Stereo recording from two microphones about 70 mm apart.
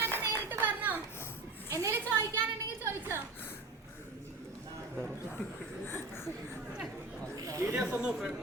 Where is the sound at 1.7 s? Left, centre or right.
Right.